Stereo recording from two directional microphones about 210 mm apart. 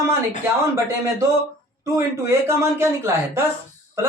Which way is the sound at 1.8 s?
15° right (ahead or behind).